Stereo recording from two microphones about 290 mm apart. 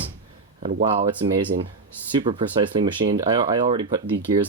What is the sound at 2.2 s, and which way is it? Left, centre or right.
Speech, centre.